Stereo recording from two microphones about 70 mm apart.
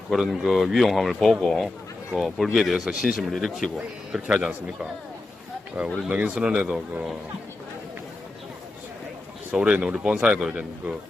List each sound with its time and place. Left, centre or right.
0.3 s a man's voice: centre
6.1 s speech: right
9.5 s a man's voice: centre